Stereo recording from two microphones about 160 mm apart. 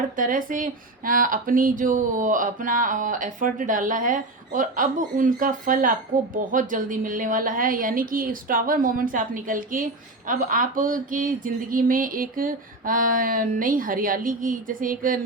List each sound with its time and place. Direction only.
0.2 s speech: 60° right (ahead or behind)